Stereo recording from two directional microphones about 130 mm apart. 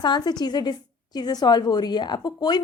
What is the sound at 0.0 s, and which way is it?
A woman's voice, 35° left (ahead or behind).